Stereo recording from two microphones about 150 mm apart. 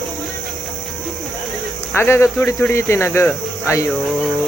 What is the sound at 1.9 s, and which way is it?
Speech, 15° left (ahead or behind).